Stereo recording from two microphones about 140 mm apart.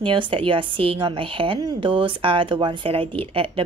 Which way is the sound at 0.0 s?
35° right (ahead or behind).